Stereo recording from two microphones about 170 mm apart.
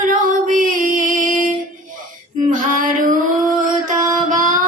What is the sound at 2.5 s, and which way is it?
Female singing, 50° right (ahead or behind).